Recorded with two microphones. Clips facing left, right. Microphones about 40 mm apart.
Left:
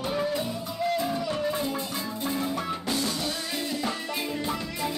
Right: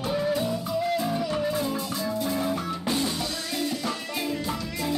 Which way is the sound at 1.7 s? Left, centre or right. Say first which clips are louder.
Right 3 dB; centre.